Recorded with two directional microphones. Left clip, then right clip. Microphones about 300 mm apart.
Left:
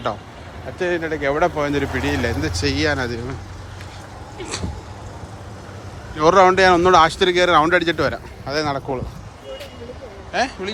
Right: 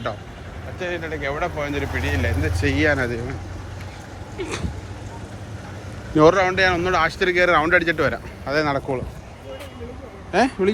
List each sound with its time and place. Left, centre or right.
0.8 s speech: centre
4.4 s speech: centre
6.3 s speech: centre
10.3 s a man's voice: centre